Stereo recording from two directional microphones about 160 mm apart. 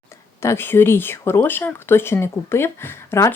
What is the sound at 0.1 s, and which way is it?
Speech, 15° left (ahead or behind).